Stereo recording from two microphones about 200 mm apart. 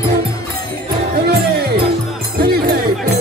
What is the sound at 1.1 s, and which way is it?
Music, 55° right (ahead or behind).